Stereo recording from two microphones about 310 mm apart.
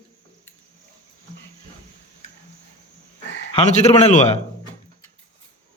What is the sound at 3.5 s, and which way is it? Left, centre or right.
Speech, centre.